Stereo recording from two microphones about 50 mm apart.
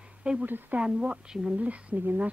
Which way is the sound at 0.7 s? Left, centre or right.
Right.